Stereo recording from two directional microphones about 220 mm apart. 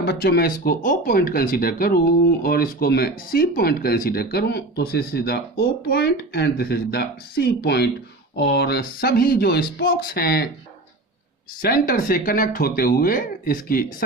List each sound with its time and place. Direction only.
0.0 s speech: 45° left (ahead or behind)
11.6 s speech: 40° left (ahead or behind)